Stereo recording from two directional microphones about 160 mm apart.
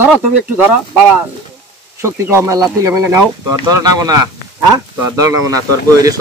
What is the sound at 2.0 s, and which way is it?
Speech, 15° right (ahead or behind).